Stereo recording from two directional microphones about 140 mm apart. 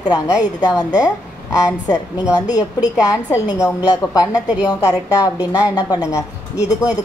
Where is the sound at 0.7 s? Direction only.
30° left (ahead or behind).